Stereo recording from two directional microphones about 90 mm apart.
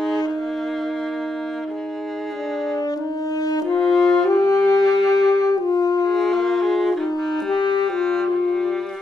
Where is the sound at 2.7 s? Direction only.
45° left (ahead or behind).